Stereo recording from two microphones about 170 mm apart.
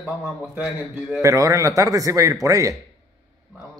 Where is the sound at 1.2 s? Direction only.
20° right (ahead or behind).